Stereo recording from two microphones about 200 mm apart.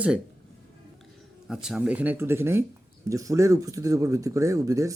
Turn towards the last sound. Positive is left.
turn(degrees=-15)  # may be behind; listen again after turning